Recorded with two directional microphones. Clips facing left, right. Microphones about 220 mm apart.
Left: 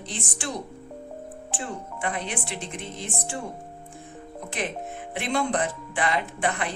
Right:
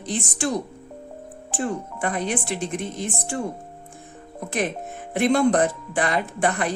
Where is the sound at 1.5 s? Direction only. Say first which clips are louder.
Right 8 dB; 45° right (ahead or behind).